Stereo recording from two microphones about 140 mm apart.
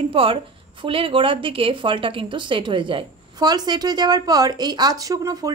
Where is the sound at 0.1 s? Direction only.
40° right (ahead or behind).